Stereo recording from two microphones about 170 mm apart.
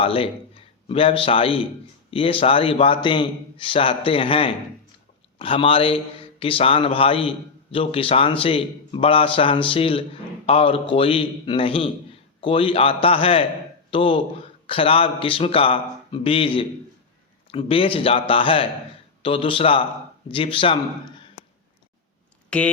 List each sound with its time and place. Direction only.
0.0 s a man's voice: 30° left (ahead or behind)
22.4 s speech: 5° left (ahead or behind)